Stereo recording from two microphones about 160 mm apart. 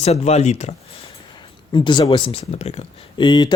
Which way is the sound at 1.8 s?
30° left (ahead or behind).